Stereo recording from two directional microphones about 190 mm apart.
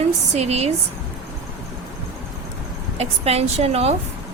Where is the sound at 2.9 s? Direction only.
35° right (ahead or behind).